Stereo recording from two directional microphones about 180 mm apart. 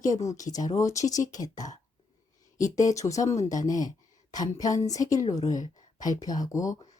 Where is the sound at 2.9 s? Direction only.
20° left (ahead or behind).